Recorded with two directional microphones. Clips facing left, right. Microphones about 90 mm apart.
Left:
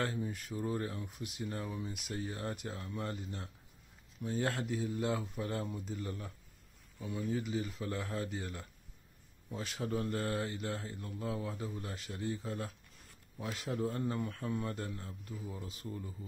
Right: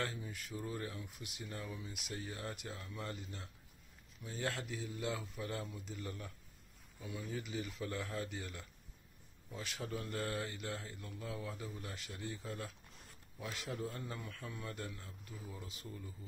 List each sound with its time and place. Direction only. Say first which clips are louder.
0.0 s speech: left 5 dB; 35° left (ahead or behind)